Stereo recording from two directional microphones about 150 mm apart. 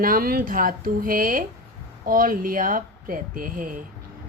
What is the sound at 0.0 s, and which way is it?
Speech, 75° right (ahead or behind).